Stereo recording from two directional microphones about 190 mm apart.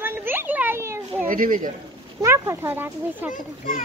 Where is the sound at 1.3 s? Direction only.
45° right (ahead or behind).